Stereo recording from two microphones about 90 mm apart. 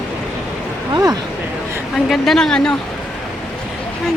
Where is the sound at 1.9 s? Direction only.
5° left (ahead or behind).